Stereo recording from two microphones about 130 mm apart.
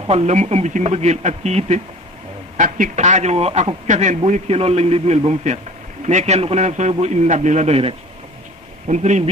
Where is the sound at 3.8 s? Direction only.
70° right (ahead or behind).